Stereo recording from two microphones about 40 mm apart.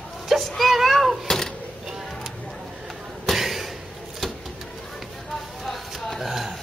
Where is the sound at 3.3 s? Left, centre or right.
Centre.